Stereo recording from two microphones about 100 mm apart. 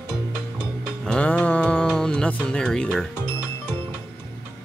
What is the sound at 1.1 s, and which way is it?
Music, 10° left (ahead or behind).